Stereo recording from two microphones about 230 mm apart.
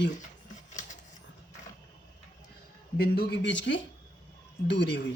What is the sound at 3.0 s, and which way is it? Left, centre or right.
Speech, left.